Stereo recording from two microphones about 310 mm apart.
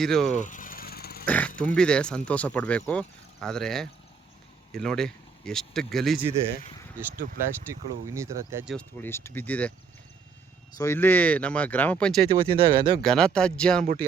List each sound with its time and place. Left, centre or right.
0.0 s speech: centre
0.3 s vehicle: left
1.2 s speech: centre
7.7 s speech: centre
10.8 s speech: centre
12.3 s speech: centre
13.0 s speech: centre